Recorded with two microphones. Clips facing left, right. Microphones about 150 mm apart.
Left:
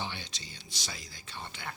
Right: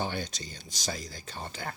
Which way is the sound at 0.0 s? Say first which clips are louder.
Right 7 dB; 45° right (ahead or behind).